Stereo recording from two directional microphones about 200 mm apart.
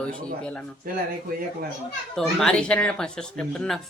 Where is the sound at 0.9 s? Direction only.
45° right (ahead or behind).